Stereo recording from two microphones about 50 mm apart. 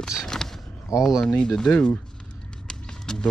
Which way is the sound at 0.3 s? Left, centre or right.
Centre.